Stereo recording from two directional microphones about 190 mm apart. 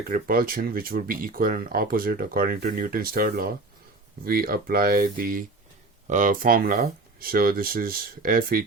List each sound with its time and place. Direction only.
0.1 s speech: 50° right (ahead or behind)